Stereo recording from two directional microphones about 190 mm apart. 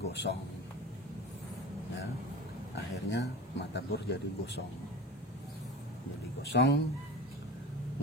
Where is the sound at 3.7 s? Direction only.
60° left (ahead or behind).